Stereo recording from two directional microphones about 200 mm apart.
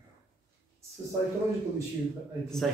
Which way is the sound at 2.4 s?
Centre (ahead or behind).